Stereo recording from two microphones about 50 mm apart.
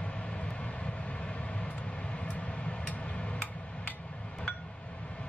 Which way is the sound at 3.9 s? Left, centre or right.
Left.